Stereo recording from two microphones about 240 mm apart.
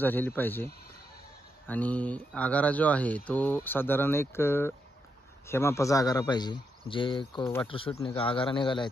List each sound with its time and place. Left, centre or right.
0.0 s speech: centre
1.7 s a man's voice: centre